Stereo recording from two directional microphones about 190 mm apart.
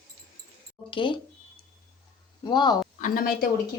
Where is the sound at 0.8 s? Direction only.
25° left (ahead or behind).